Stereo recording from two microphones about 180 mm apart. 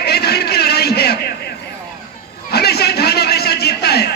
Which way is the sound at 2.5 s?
65° left (ahead or behind).